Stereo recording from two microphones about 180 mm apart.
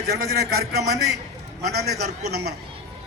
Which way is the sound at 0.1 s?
65° right (ahead or behind).